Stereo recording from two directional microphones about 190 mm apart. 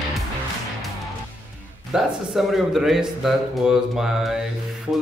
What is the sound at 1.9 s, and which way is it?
A man's voice, centre (ahead or behind).